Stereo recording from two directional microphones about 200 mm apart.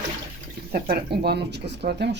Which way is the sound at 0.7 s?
50° right (ahead or behind).